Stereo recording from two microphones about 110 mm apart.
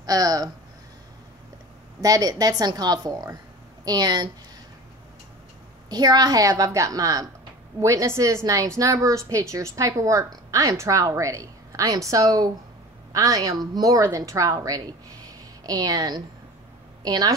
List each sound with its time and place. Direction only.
0.0 s speech: 35° right (ahead or behind)
2.0 s a woman's voice: 35° right (ahead or behind)
5.9 s a woman's voice: 40° right (ahead or behind)
15.2 s a sound: 35° right (ahead or behind)
17.0 s a woman's voice: 35° right (ahead or behind)